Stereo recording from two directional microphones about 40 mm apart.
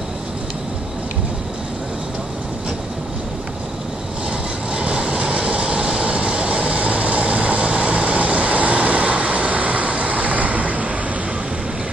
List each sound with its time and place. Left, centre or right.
4.7 s vehicle: right